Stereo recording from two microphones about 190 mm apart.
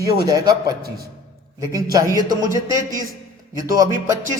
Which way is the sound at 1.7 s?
20° right (ahead or behind).